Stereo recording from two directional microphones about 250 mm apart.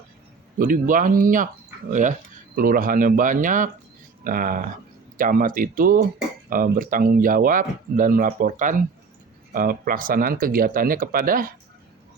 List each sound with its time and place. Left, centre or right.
0.6 s speech: right